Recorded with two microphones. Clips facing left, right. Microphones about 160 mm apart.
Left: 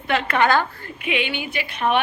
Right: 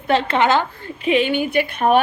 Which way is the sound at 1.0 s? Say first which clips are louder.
Right 8 dB; 40° right (ahead or behind).